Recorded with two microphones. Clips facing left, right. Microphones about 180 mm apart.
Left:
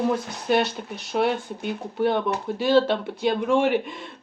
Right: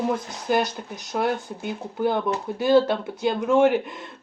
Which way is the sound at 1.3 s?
65° left (ahead or behind).